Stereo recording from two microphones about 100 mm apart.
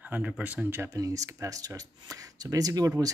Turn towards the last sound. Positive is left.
turn(degrees=-35)  # may be behind; listen again after turning